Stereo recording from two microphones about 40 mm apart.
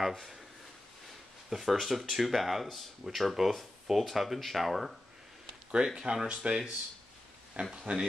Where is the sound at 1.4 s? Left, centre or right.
Centre.